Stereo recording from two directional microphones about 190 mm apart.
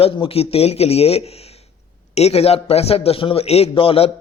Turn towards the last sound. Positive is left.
turn(degrees=30)  # may be behind; listen again after turning